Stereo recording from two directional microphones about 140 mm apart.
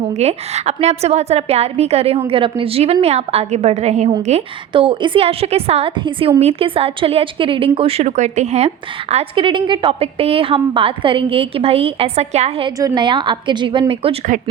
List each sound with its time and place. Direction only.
0.0 s a woman's voice: 50° right (ahead or behind)
12.6 s a woman's voice: 30° right (ahead or behind)